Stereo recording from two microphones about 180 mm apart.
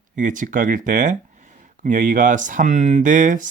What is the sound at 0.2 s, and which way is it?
Speech, 45° right (ahead or behind).